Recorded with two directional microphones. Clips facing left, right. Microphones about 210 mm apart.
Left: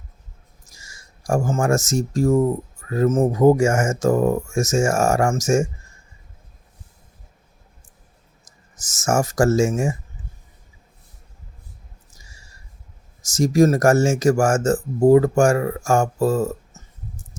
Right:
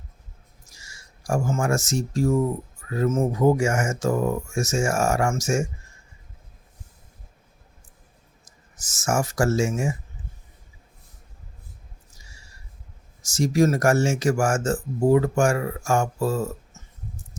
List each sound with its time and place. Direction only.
0.7 s speech: 45° left (ahead or behind)
8.7 s speech: 45° left (ahead or behind)
13.2 s speech: 45° left (ahead or behind)